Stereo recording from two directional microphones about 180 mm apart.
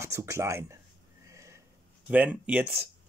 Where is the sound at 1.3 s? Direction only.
15° right (ahead or behind).